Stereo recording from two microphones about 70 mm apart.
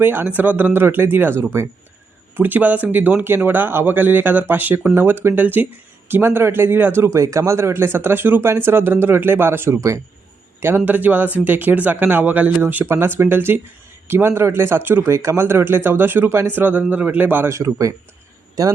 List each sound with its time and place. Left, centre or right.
0.0 s a man's voice: right
12.6 s a man's voice: right
15.0 s a man's voice: right
17.5 s speech: right